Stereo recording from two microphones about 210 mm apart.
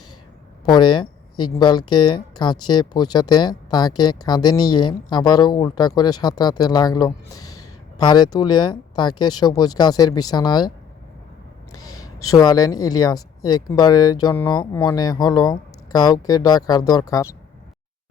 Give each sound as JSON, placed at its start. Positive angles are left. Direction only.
{"t": 0.6, "sound": "speech", "side_deg": 20}
{"t": 12.0, "sound": "speech", "side_deg": 15}